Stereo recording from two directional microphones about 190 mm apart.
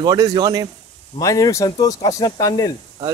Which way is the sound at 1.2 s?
15° left (ahead or behind).